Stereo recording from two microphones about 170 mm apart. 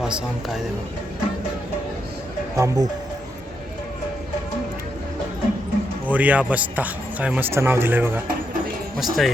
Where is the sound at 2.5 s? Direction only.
15° right (ahead or behind).